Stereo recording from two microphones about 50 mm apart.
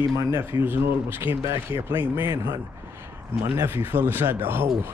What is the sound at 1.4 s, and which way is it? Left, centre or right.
Speech, right.